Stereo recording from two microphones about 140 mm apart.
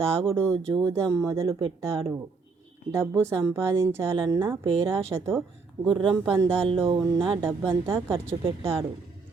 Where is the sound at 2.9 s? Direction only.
20° right (ahead or behind).